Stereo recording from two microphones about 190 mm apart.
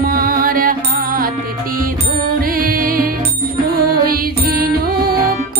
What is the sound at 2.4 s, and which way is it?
Music, 50° right (ahead or behind).